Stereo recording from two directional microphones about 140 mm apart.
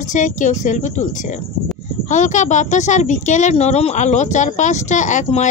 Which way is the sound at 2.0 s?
60° left (ahead or behind).